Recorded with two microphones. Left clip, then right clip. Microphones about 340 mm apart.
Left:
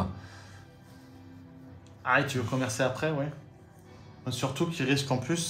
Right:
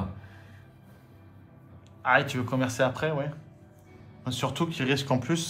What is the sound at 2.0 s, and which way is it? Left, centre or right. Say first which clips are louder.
Speech: right 3 dB; right.